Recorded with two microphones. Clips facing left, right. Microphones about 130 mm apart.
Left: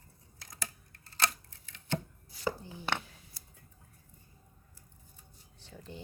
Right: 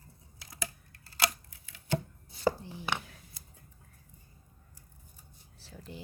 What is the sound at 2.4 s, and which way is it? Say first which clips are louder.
Chopping: right 5 dB; 30° right (ahead or behind).